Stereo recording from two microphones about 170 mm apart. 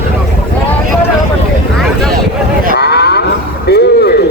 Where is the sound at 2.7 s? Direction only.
70° left (ahead or behind).